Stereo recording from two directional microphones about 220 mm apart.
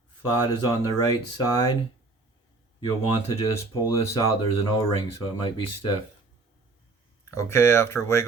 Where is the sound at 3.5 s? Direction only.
15° left (ahead or behind).